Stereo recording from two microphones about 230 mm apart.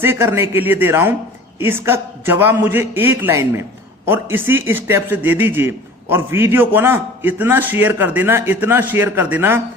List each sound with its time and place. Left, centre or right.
0.0 s a man's voice: centre